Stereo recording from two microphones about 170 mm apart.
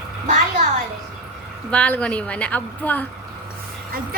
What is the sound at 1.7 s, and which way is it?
A woman's voice, 5° left (ahead or behind).